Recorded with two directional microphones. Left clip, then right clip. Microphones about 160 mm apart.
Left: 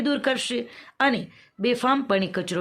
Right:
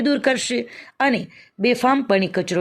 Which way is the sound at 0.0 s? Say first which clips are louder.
Right 5 dB; 30° right (ahead or behind).